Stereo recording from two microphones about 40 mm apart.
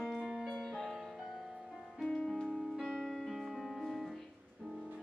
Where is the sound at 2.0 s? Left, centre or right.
Left.